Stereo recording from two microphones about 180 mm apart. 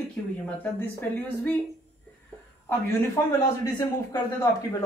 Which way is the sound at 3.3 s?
20° left (ahead or behind).